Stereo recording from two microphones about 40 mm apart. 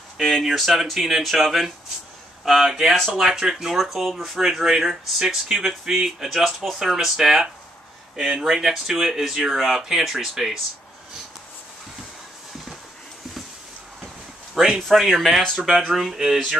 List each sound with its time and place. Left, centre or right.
0.4 s speech: centre
14.5 s a sound: centre
14.9 s speech: centre